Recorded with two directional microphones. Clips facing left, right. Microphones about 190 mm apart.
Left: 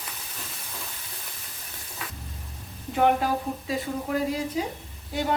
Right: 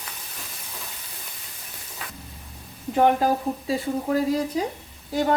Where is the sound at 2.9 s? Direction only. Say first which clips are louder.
Right 3 dB; 40° right (ahead or behind).